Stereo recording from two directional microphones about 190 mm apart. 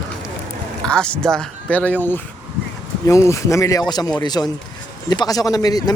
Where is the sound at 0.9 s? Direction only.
5° left (ahead or behind).